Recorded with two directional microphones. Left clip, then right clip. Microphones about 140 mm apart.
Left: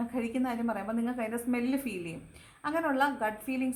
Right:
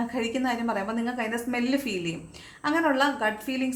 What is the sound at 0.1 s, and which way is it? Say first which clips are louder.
A woman's voice: right 5 dB; 20° left (ahead or behind).